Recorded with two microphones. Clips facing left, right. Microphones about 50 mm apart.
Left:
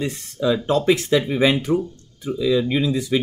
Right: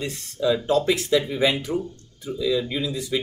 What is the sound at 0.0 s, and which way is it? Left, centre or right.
Speech, left.